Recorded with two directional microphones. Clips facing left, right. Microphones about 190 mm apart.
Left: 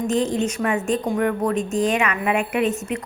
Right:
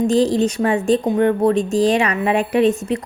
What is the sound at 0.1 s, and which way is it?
A woman's voice, 35° right (ahead or behind).